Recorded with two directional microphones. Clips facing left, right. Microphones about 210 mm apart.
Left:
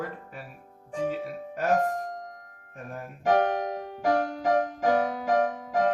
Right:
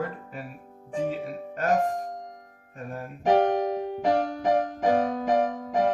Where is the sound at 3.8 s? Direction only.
15° right (ahead or behind).